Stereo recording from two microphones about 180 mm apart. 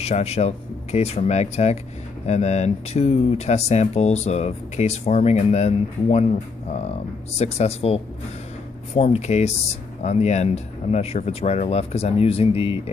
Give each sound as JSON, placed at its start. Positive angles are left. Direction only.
{"t": 0.0, "sound": "speech", "side_deg": 35}